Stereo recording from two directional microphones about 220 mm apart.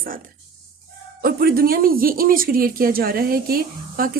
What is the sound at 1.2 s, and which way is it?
Speech, 45° right (ahead or behind).